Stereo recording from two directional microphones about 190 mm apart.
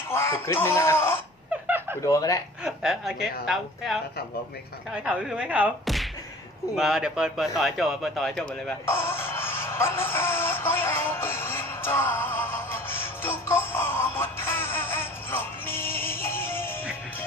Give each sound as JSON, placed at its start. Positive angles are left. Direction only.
{"t": 0.1, "sound": "speech", "side_deg": 10}
{"t": 1.6, "sound": "a sound", "side_deg": -10}
{"t": 2.0, "sound": "speech", "side_deg": 15}
{"t": 2.6, "sound": "speech", "side_deg": -5}
{"t": 5.0, "sound": "speech", "side_deg": -5}
{"t": 6.7, "sound": "a sound", "side_deg": 0}